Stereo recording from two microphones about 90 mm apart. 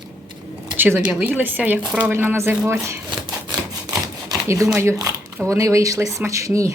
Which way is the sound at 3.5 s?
45° right (ahead or behind).